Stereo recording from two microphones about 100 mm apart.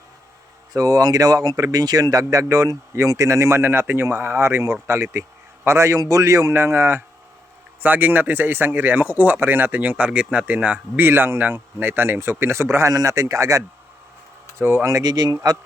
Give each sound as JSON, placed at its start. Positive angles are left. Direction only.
{"t": 0.7, "sound": "speech", "side_deg": -35}